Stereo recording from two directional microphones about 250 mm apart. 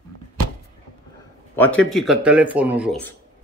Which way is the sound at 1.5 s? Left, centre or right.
Centre.